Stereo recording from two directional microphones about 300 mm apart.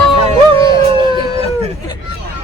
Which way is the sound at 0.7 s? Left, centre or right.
Centre.